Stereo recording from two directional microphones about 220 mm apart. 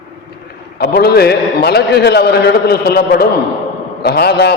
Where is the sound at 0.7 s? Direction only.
45° left (ahead or behind).